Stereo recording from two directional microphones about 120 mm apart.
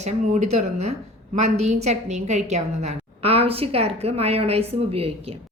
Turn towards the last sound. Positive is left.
turn(degrees=-55)  # may be behind; listen again after turning